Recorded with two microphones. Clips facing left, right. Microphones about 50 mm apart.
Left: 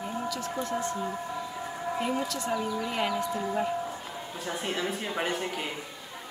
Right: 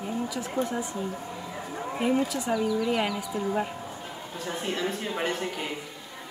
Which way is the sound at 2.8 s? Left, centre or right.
Centre.